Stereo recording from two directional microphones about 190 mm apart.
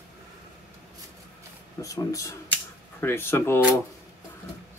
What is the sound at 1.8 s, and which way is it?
Speech, 15° left (ahead or behind).